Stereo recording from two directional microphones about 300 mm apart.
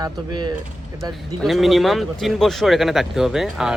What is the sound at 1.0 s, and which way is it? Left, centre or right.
Speech, centre.